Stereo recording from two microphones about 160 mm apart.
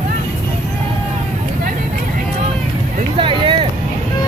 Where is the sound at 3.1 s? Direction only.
30° right (ahead or behind).